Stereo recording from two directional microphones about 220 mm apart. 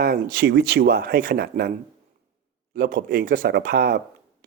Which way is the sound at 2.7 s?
40° right (ahead or behind).